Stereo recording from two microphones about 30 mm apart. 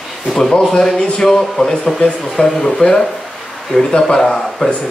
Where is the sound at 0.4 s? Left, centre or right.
Left.